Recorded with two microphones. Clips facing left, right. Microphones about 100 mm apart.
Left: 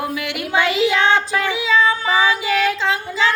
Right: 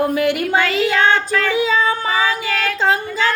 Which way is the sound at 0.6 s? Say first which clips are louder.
Left 3 dB; 20° left (ahead or behind).